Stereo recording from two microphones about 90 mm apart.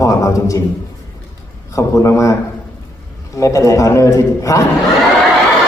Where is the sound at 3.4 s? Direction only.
35° left (ahead or behind).